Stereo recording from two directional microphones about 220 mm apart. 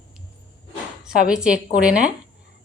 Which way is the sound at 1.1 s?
5° right (ahead or behind).